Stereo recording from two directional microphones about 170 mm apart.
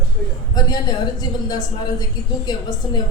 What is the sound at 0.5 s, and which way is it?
A woman's voice, 25° left (ahead or behind).